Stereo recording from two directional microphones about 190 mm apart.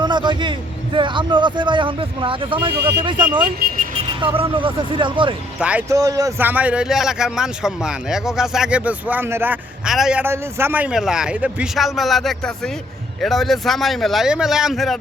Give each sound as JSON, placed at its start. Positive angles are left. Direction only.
{"t": 0.0, "sound": "a sound", "side_deg": -25}
{"t": 0.9, "sound": "speech", "side_deg": -25}
{"t": 5.5, "sound": "speech", "side_deg": -5}
{"t": 6.0, "sound": "a man's voice", "side_deg": -20}